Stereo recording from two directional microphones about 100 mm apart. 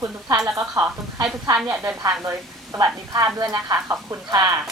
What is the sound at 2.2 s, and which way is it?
A woman's voice, 35° right (ahead or behind).